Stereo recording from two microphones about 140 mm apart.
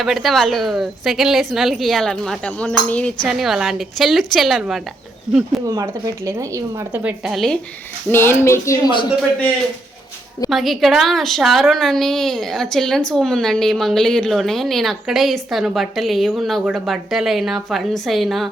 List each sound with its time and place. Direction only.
0.0 s a woman's voice: centre (ahead or behind)
5.6 s a woman's voice: 20° right (ahead or behind)
7.3 s a woman's voice: centre (ahead or behind)
8.1 s speech: 15° left (ahead or behind)
10.5 s a woman's voice: centre (ahead or behind)